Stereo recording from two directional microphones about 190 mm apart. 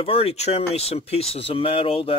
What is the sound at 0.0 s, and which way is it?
Speech, 30° left (ahead or behind).